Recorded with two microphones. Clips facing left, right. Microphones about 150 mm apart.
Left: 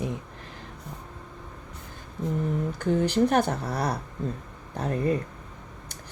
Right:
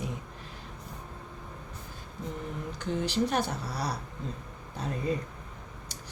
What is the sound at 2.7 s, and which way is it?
Speech, 50° left (ahead or behind).